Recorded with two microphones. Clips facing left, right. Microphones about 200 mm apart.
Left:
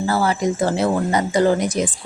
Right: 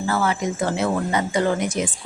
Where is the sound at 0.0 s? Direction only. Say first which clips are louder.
Left 3 dB; 35° left (ahead or behind).